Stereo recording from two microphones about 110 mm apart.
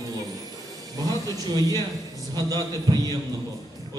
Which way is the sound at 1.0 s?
35° right (ahead or behind).